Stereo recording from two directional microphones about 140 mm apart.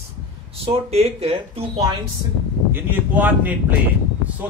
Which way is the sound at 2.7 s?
15° right (ahead or behind).